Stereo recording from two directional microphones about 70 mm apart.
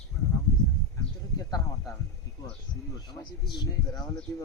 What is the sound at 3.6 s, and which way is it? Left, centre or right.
Speech, left.